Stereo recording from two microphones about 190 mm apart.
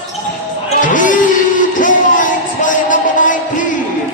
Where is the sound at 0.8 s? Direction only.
45° left (ahead or behind).